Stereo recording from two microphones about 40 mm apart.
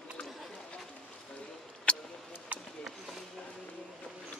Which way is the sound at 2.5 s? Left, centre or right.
Right.